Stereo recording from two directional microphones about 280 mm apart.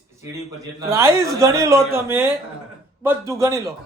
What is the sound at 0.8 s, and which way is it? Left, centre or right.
A man's voice, centre.